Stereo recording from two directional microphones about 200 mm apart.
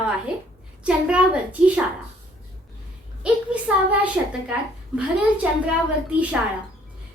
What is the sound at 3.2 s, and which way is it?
Speech, 5° right (ahead or behind).